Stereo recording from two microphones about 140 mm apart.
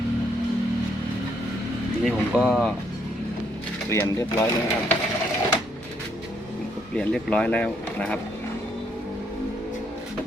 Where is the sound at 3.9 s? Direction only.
20° left (ahead or behind).